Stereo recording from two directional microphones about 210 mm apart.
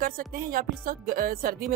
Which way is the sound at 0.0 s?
45° right (ahead or behind).